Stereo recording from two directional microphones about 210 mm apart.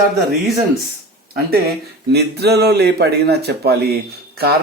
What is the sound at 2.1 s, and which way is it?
Mantra, 50° right (ahead or behind).